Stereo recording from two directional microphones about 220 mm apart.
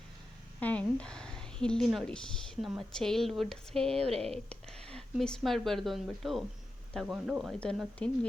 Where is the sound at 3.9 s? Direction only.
25° right (ahead or behind).